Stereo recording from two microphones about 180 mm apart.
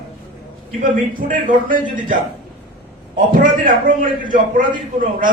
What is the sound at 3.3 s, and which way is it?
A man's voice, 50° right (ahead or behind).